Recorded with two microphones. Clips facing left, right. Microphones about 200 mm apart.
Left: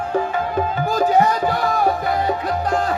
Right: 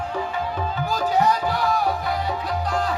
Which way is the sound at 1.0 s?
50° left (ahead or behind).